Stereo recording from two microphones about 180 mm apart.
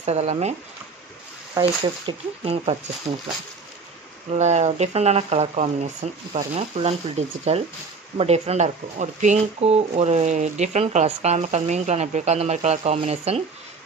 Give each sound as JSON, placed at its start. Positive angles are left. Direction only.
{"t": 0.0, "sound": "speech", "side_deg": -35}
{"t": 1.5, "sound": "speech", "side_deg": -25}
{"t": 4.3, "sound": "speech", "side_deg": -40}